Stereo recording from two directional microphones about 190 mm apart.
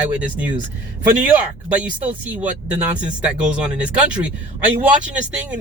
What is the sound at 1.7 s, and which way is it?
Speech, 5° right (ahead or behind).